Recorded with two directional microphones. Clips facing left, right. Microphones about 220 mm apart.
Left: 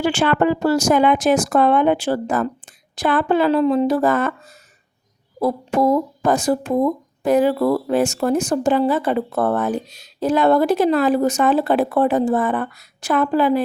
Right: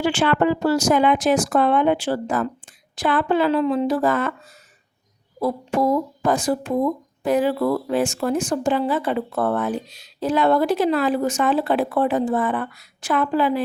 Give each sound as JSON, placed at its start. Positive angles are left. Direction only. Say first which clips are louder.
{"t": 0.0, "sound": "speech", "louder": "left 2 dB", "side_deg": 40}
{"t": 5.4, "sound": "speech", "louder": "left 3 dB", "side_deg": 45}